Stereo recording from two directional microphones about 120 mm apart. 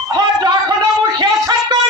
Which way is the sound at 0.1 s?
35° right (ahead or behind).